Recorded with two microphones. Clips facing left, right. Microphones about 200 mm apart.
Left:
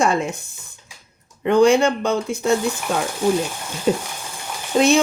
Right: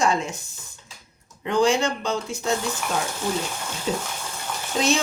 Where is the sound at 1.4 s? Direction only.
55° left (ahead or behind).